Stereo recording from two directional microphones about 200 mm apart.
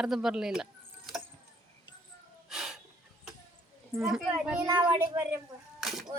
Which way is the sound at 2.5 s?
Centre (ahead or behind).